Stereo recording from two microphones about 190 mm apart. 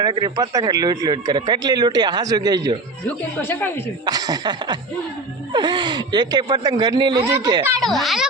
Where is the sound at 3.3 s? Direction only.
10° left (ahead or behind).